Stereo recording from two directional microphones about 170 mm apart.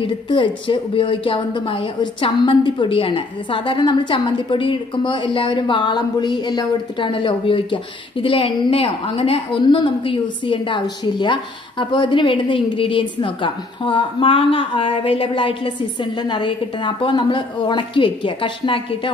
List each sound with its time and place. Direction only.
0.0 s speech: 30° left (ahead or behind)